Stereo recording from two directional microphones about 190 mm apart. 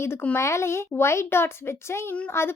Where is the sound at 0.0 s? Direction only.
10° left (ahead or behind).